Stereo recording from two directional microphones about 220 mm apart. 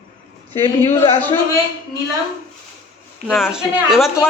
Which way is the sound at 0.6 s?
25° left (ahead or behind).